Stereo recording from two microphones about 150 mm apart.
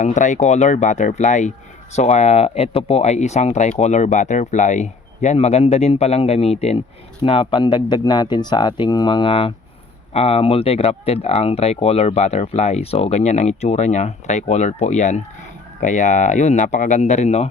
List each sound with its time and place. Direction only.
0.0 s speech: 55° left (ahead or behind)